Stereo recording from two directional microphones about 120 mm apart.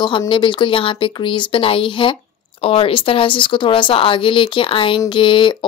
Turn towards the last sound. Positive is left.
turn(degrees=45)  # may be behind; listen again after turning